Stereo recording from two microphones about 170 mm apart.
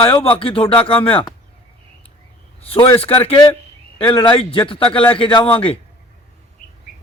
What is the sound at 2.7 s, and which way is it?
A man's voice, 30° left (ahead or behind).